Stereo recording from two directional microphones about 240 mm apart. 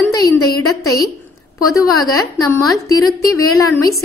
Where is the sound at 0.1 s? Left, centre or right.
Centre.